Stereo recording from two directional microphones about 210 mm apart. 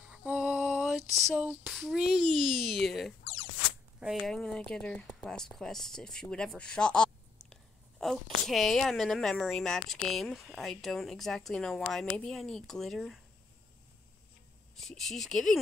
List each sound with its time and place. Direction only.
0.0 s female singing: 5° right (ahead or behind)
4.0 s a woman's voice: centre (ahead or behind)
14.8 s a woman's voice: centre (ahead or behind)